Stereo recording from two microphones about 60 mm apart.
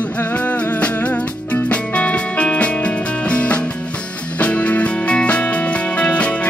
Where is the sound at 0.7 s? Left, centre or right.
Left.